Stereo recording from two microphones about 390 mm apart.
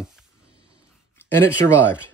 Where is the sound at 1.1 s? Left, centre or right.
Centre.